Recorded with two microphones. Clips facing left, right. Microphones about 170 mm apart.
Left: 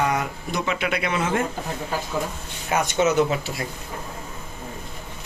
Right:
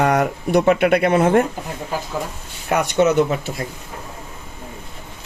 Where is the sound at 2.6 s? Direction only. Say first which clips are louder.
Right 4 dB; 60° right (ahead or behind).